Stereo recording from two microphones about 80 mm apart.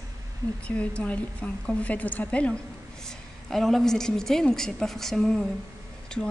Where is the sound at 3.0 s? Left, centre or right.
Centre.